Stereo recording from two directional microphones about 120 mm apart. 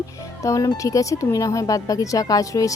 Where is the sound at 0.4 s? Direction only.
30° left (ahead or behind).